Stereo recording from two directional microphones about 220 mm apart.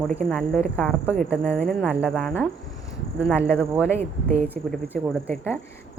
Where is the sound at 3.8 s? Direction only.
10° left (ahead or behind).